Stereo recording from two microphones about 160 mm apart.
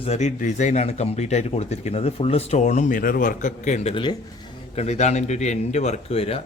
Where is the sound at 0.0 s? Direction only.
45° left (ahead or behind).